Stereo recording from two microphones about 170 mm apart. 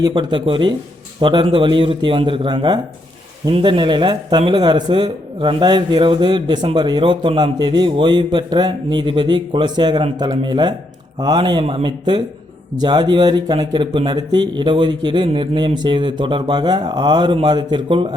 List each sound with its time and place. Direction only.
0.0 s a man's voice: 25° right (ahead or behind)